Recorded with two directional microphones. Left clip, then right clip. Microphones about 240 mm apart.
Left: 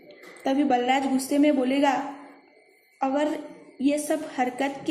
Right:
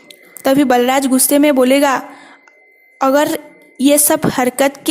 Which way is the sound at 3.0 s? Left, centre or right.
Right.